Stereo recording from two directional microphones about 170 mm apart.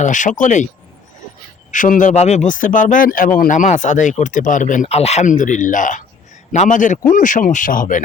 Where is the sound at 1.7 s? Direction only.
50° left (ahead or behind).